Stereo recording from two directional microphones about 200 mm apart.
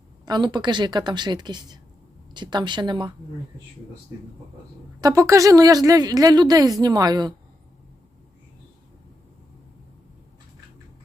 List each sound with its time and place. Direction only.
0.3 s speech: 20° right (ahead or behind)
4.9 s speech: 15° right (ahead or behind)